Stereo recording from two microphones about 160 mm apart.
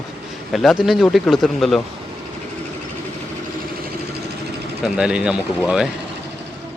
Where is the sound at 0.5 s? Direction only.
Centre (ahead or behind).